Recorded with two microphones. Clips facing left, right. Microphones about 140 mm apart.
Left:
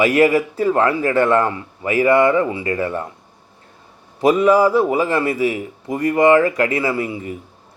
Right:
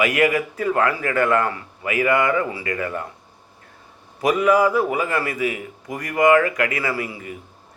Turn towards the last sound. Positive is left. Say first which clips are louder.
# left 5 dB
turn(degrees=25)  # may be behind; listen again after turning